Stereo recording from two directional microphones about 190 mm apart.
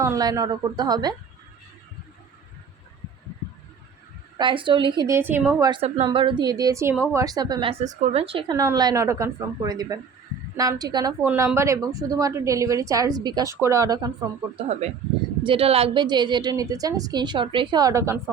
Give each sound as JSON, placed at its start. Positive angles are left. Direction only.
{"t": 0.0, "sound": "speech", "side_deg": -15}
{"t": 4.4, "sound": "a woman's voice", "side_deg": -25}
{"t": 14.5, "sound": "speech", "side_deg": -35}